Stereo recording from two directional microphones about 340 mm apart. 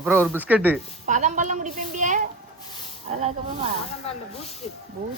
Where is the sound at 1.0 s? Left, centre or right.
Right.